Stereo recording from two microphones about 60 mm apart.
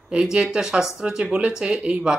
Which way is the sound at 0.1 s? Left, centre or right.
Centre.